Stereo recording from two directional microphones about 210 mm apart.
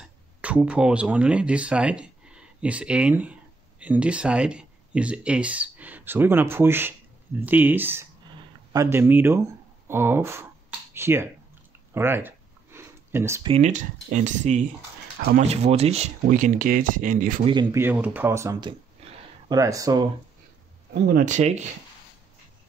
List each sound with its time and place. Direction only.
0.0 s speech: 5° right (ahead or behind)
9.8 s finger snapping: 10° right (ahead or behind)
11.9 s a sound: 10° right (ahead or behind)
13.5 s speech: 35° right (ahead or behind)
17.5 s speech: 20° right (ahead or behind)
21.1 s speech: 40° right (ahead or behind)